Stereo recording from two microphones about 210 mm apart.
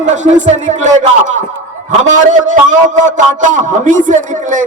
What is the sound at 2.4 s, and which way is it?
Speech, 35° right (ahead or behind).